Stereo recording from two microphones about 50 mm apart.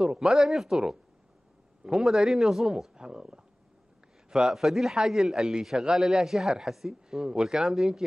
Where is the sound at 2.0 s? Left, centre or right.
Centre.